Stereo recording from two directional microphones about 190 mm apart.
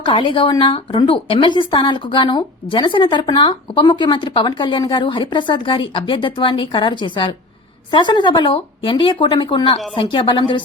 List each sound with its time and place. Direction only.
0.0 s speech: 25° left (ahead or behind)